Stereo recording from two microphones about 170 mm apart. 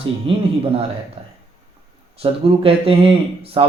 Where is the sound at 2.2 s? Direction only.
35° right (ahead or behind).